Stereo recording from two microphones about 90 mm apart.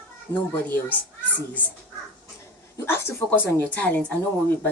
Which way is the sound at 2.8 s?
30° left (ahead or behind).